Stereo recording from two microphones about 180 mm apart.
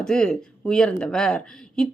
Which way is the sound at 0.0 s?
5° left (ahead or behind).